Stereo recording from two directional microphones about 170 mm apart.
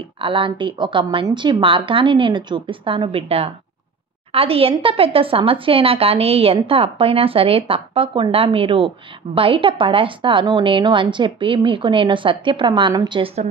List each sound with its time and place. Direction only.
0.2 s a woman's voice: 30° right (ahead or behind)